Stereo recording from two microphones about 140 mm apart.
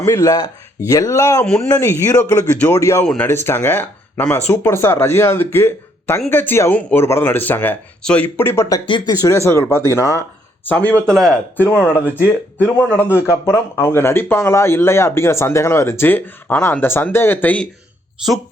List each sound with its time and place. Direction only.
0.0 s speech: 20° left (ahead or behind)